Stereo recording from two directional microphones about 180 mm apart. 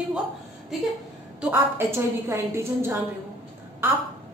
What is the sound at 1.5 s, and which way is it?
A woman's voice, 15° right (ahead or behind).